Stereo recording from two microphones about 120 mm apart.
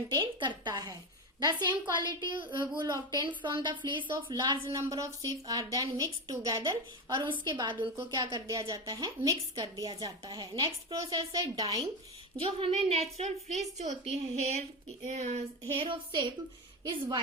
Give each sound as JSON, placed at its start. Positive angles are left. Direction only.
{"t": 0.2, "sound": "a woman's voice", "side_deg": -40}
{"t": 4.7, "sound": "a woman's voice", "side_deg": -30}
{"t": 12.4, "sound": "a woman's voice", "side_deg": -45}
{"t": 14.0, "sound": "a woman's voice", "side_deg": -65}
{"t": 15.0, "sound": "speech", "side_deg": -80}
{"t": 15.7, "sound": "a woman's voice", "side_deg": -45}